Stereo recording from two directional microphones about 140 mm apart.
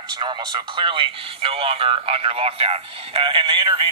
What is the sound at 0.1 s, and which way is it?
Speech, 35° right (ahead or behind).